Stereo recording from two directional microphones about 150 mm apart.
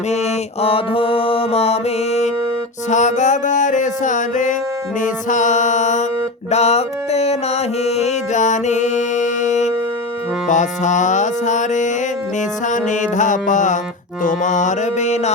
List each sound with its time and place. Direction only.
0.6 s music: 40° left (ahead or behind)